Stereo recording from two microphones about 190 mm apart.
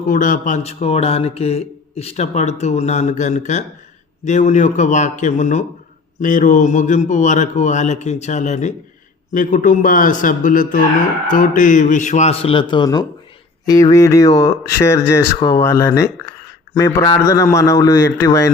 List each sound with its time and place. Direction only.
0.1 s a man's voice: 45° left (ahead or behind); by 18.5 s 20° left (ahead or behind)